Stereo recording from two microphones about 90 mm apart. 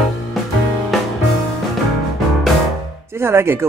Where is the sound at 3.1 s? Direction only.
30° right (ahead or behind).